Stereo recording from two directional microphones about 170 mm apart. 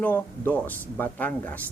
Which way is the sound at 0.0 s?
10° left (ahead or behind).